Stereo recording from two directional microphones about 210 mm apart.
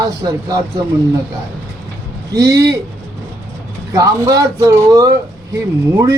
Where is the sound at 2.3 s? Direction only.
15° right (ahead or behind).